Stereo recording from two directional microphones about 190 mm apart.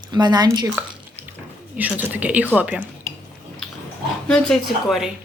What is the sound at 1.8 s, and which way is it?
Speech, 10° right (ahead or behind).